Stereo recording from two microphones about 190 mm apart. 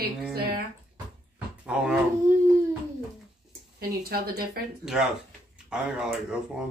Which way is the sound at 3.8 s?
55° right (ahead or behind).